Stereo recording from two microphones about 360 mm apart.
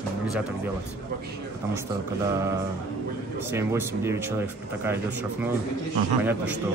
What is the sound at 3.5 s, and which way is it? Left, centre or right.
Speech, centre.